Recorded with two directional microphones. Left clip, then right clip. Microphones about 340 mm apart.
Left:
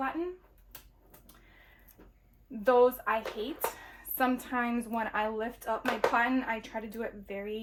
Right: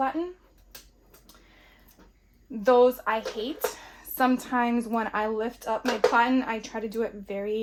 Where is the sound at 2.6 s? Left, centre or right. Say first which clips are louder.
Right 4 dB; centre.